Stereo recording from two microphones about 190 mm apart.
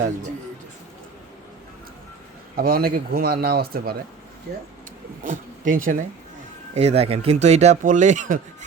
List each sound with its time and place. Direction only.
2.6 s speech: 50° right (ahead or behind)
5.2 s speech: 45° right (ahead or behind)
6.7 s speech: 35° right (ahead or behind)